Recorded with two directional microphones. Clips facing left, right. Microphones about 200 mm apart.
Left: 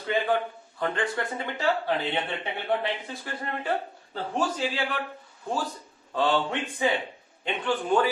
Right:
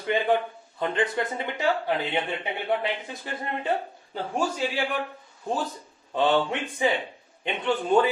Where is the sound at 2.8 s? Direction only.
20° right (ahead or behind).